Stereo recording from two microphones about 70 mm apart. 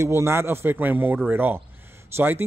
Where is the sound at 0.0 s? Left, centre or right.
Right.